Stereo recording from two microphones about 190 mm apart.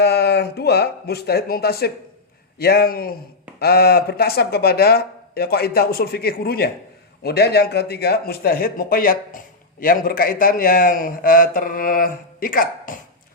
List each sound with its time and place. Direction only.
0.0 s a man's voice: 60° left (ahead or behind)